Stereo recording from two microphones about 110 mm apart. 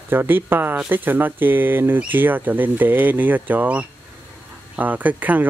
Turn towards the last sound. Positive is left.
turn(degrees=-15)  # may be behind; listen again after turning